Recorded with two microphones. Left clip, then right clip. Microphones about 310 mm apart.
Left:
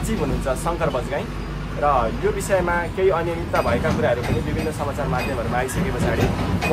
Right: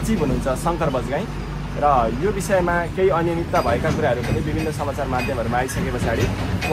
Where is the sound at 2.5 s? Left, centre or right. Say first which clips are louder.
Right 2 dB; right.